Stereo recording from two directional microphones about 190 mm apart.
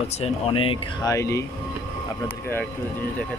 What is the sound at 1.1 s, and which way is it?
Speech, 15° left (ahead or behind).